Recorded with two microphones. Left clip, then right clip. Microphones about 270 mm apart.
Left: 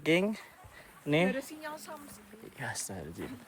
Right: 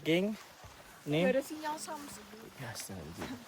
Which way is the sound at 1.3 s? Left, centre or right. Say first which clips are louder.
Right 4 dB; centre.